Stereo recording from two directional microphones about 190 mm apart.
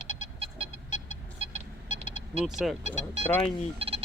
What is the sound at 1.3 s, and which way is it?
Vehicle, 35° right (ahead or behind).